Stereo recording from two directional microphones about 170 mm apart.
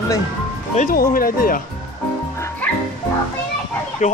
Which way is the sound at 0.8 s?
55° left (ahead or behind).